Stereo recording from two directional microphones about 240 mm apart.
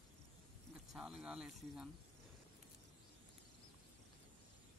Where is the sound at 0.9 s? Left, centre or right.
Centre.